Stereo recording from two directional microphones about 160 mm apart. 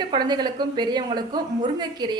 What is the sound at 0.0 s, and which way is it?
A woman's voice, 25° right (ahead or behind).